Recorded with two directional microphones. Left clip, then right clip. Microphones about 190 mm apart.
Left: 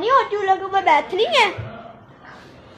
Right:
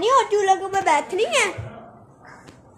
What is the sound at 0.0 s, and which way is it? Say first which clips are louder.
Speech: even; 25° right (ahead or behind).